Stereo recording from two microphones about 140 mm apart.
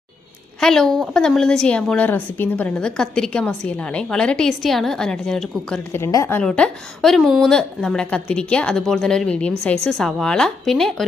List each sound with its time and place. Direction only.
0.6 s a woman's voice: 5° left (ahead or behind)
5.9 s a woman's voice: 20° left (ahead or behind)
6.4 s a woman's voice: 5° left (ahead or behind)